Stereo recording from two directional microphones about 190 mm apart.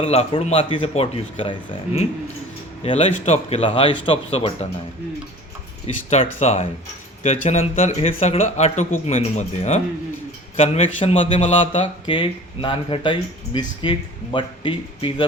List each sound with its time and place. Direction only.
0.0 s speech: 30° left (ahead or behind)
2.8 s speech: 35° left (ahead or behind)
6.1 s speech: 35° left (ahead or behind)